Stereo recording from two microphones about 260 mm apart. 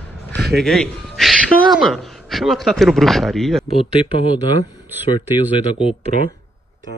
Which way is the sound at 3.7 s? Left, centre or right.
Left.